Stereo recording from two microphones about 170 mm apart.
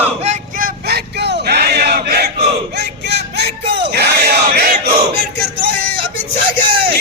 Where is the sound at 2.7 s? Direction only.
75° right (ahead or behind).